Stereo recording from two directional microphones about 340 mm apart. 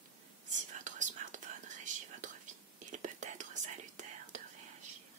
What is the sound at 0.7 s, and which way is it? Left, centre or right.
Whispering, right.